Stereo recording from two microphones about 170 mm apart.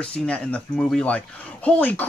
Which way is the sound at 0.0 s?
5° left (ahead or behind).